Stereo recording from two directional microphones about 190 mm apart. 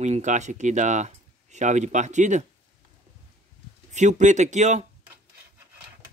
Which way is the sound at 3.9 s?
40° right (ahead or behind).